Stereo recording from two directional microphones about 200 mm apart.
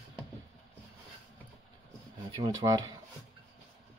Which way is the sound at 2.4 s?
20° right (ahead or behind).